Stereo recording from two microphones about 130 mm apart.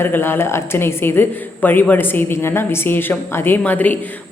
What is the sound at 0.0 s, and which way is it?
Speech, 15° left (ahead or behind).